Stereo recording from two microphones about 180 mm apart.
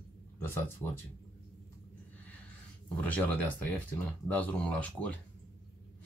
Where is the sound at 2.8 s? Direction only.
10° left (ahead or behind).